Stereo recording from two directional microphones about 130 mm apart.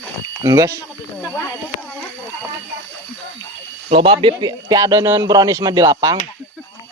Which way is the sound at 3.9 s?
40° right (ahead or behind).